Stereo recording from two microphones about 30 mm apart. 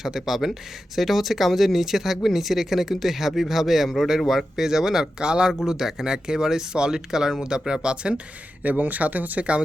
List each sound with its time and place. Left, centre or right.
0.0 s speech: centre
5.2 s speech: right
5.5 s speech: centre
7.7 s speech: right
8.6 s speech: right